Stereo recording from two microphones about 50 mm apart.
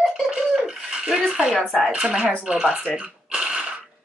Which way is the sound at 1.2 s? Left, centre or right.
Centre.